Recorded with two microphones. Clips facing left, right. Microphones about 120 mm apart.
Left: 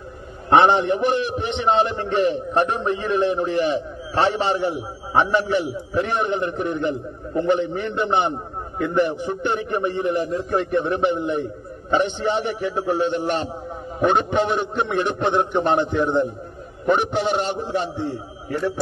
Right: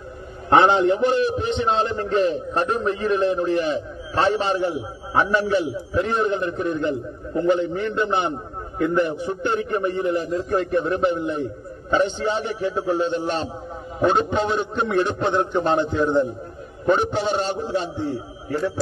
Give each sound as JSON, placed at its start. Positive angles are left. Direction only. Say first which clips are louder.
{"t": 0.6, "sound": "a man's voice", "louder": "even", "side_deg": 20}